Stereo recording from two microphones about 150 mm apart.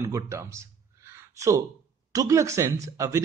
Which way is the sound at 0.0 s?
20° right (ahead or behind).